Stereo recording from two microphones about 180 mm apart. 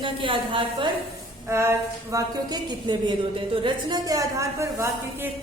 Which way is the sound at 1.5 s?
15° right (ahead or behind).